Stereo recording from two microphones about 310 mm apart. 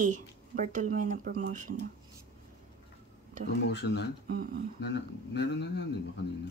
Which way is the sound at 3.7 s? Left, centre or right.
Left.